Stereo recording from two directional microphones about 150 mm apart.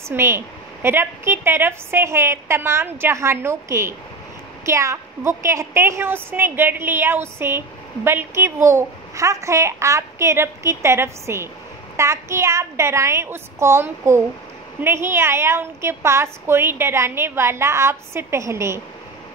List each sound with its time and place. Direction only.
0.1 s a woman's voice: 15° right (ahead or behind)